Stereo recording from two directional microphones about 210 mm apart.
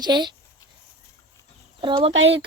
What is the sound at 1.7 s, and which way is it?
Speech, 25° right (ahead or behind).